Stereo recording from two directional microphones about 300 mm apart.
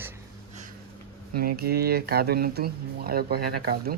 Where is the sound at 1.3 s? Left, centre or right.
Right.